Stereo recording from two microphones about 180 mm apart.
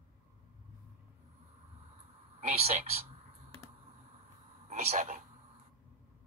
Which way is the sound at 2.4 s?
35° right (ahead or behind).